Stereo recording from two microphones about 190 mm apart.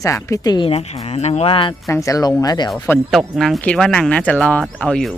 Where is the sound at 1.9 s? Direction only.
15° left (ahead or behind).